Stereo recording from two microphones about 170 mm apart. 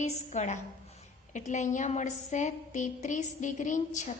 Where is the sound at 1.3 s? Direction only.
45° left (ahead or behind).